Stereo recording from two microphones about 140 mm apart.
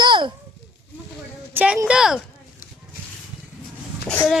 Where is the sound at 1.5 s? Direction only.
10° right (ahead or behind).